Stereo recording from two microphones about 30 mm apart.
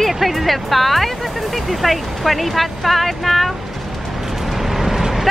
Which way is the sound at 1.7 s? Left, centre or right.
Centre.